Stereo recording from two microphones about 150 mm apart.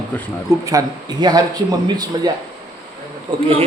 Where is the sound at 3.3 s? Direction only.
40° right (ahead or behind).